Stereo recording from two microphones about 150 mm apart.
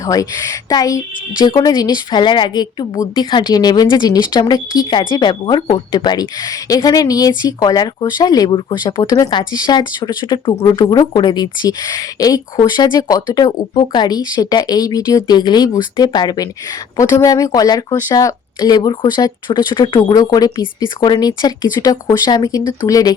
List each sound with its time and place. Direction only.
0.0 s a woman's voice: 25° left (ahead or behind)